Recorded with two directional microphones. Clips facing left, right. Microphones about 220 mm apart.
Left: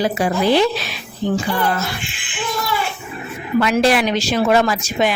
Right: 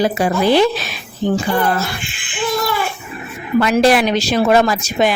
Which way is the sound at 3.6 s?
45° right (ahead or behind).